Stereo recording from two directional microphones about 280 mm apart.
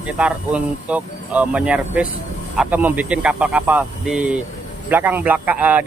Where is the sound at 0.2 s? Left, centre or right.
Centre.